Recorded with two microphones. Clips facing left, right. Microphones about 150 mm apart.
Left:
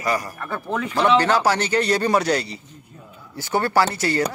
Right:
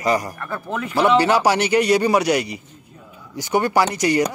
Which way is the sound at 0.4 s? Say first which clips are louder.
Left 1 dB; centre (ahead or behind).